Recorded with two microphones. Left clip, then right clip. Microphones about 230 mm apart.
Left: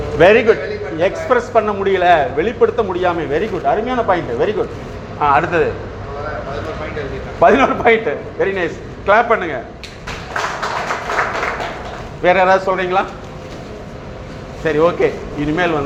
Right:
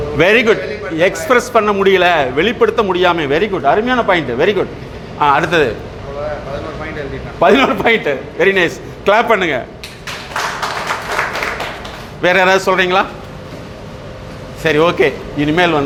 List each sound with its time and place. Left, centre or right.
0.2 s a man's voice: right
7.3 s a man's voice: right
12.2 s a man's voice: right
14.6 s a man's voice: right